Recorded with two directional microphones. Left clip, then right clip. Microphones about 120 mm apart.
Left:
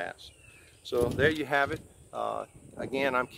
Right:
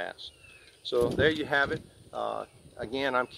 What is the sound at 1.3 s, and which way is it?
Speech, 35° left (ahead or behind).